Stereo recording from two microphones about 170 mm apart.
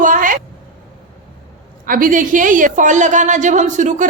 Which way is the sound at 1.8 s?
55° right (ahead or behind).